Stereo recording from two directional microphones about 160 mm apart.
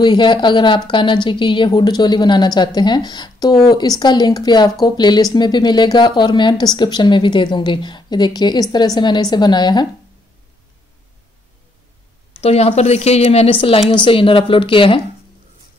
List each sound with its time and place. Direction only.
0.0 s speech: 30° left (ahead or behind)
12.4 s a woman's voice: 40° left (ahead or behind)